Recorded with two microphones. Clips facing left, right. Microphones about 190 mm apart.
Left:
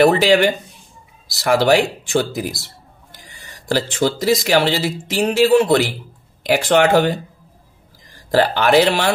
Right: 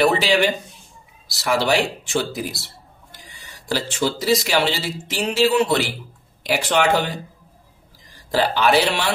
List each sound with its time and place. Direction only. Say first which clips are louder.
0.0 s speech: left 5 dB; 50° left (ahead or behind)
3.6 s speech: left 4 dB; 50° left (ahead or behind)
8.3 s speech: left 3 dB; 50° left (ahead or behind)